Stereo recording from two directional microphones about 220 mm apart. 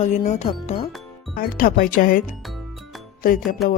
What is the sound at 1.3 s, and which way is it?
Speech, 40° left (ahead or behind).